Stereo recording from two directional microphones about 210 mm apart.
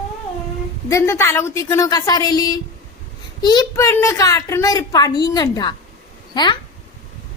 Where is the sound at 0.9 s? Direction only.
15° left (ahead or behind).